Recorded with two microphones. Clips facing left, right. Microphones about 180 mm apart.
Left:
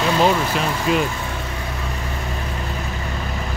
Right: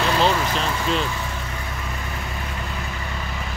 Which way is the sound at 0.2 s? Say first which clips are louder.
Left 3 dB; 10° left (ahead or behind).